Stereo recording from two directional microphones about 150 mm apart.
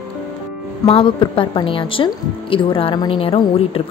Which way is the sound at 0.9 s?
35° left (ahead or behind).